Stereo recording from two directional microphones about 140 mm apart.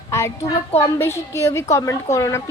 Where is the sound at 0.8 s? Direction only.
20° left (ahead or behind).